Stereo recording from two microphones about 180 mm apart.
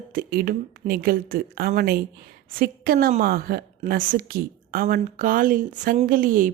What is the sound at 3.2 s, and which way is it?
Speech, 55° right (ahead or behind).